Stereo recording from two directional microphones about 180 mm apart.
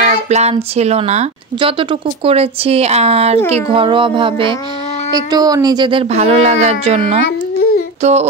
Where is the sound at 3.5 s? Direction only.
30° right (ahead or behind).